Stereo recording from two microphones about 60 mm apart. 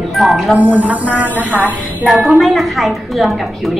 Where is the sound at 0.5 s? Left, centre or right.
Right.